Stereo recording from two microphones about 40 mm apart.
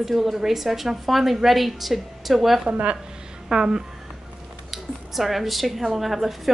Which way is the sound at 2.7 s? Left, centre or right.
Right.